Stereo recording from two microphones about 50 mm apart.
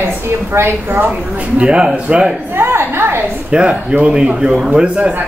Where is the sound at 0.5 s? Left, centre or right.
Right.